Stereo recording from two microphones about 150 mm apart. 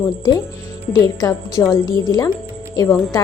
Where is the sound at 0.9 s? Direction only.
20° left (ahead or behind).